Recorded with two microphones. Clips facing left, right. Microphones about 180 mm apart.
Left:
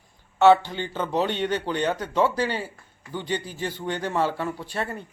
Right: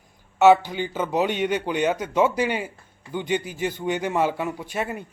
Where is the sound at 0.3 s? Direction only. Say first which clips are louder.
Right 1 dB; 10° right (ahead or behind).